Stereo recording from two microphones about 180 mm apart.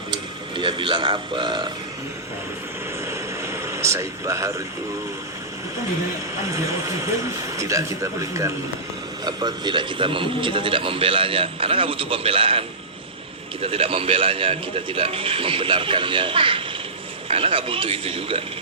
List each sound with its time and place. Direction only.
0.1 s speech: 25° right (ahead or behind)
3.1 s a sound: 15° right (ahead or behind)
6.4 s a man's voice: 15° right (ahead or behind)